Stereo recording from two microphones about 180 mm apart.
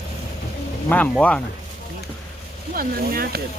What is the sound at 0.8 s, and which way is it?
Speech, 10° left (ahead or behind).